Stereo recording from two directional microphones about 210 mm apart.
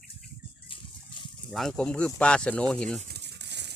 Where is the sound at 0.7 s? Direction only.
25° left (ahead or behind).